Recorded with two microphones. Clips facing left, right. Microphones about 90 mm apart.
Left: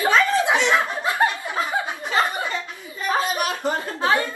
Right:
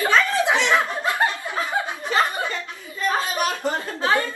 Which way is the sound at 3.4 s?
20° left (ahead or behind).